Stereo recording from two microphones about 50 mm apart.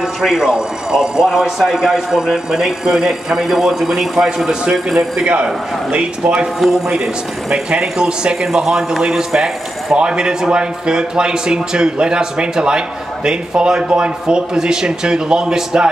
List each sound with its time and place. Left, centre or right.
0.2 s a man's voice: centre
5.2 s a man's voice: right